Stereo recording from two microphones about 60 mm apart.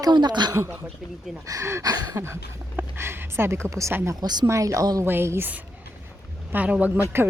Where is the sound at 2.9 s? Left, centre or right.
Right.